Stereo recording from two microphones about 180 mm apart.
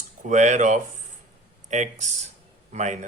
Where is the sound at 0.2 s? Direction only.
40° right (ahead or behind).